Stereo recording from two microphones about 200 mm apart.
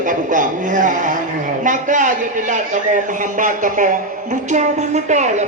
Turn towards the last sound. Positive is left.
turn(degrees=-35)  # may be behind; listen again after turning